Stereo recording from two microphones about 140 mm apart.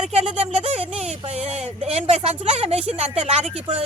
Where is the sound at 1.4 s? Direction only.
45° right (ahead or behind).